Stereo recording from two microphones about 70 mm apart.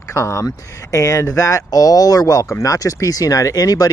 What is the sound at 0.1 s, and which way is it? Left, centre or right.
Speech, left.